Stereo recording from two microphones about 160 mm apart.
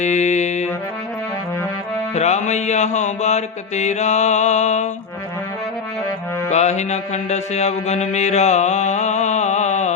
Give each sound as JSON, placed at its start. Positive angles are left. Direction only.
{"t": 0.0, "sound": "music", "side_deg": 45}
{"t": 2.1, "sound": "mantra", "side_deg": 45}
{"t": 6.5, "sound": "mantra", "side_deg": 45}